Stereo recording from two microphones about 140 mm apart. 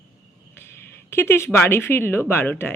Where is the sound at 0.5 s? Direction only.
15° left (ahead or behind).